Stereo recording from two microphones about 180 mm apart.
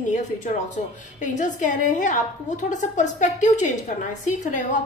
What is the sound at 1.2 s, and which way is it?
A woman's voice, 45° left (ahead or behind).